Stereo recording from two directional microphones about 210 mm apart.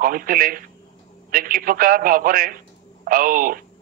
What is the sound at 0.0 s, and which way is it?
Speech, 40° right (ahead or behind).